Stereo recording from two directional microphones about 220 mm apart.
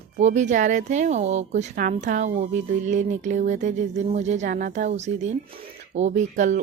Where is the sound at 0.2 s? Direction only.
35° right (ahead or behind).